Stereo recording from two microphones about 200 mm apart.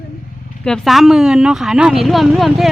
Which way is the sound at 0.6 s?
Centre (ahead or behind).